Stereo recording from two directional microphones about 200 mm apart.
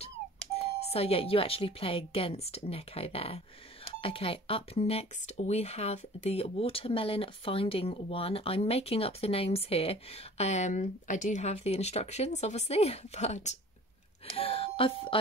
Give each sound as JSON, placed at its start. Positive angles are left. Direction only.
{"t": 0.6, "sound": "speech", "side_deg": 30}